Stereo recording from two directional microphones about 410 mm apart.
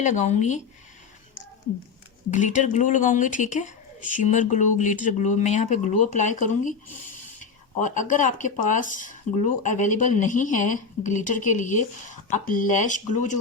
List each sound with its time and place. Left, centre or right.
0.0 s speech: centre
2.3 s speech: centre
7.3 s a sound: centre
8.1 s speech: centre